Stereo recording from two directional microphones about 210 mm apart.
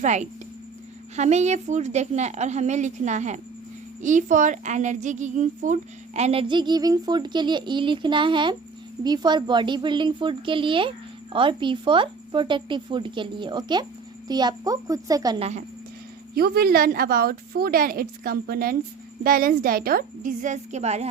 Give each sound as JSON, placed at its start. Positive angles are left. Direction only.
{"t": 0.0, "sound": "a woman's voice", "side_deg": -35}
{"t": 16.3, "sound": "a woman's voice", "side_deg": -45}